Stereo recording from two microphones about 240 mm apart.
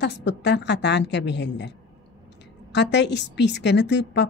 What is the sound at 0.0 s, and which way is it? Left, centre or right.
Speech, left.